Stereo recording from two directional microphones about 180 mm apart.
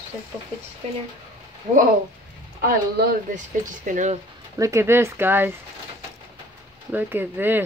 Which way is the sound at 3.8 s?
45° right (ahead or behind).